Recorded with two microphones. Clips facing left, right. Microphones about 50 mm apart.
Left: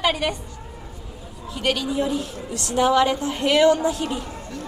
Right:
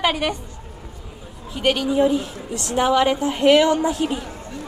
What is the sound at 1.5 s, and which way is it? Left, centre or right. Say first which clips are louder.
A woman's voice: right 4 dB; right.